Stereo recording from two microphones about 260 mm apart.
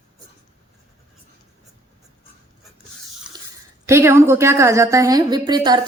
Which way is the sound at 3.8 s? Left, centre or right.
Centre.